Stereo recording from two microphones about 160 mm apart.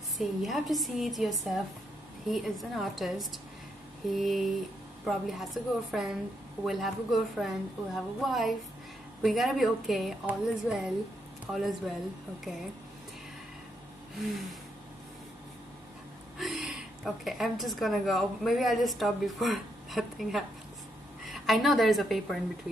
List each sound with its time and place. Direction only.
0.2 s a woman's voice: centre (ahead or behind)
14.1 s a woman's voice: centre (ahead or behind)
16.3 s a woman's voice: centre (ahead or behind)